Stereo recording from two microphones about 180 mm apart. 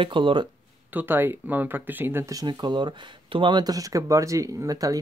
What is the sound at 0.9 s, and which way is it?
Speech, 10° right (ahead or behind).